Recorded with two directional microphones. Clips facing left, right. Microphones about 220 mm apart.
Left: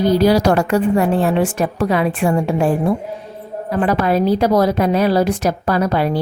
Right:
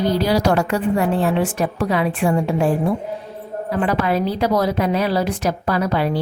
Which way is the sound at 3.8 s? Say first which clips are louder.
Left 4 dB; 40° left (ahead or behind).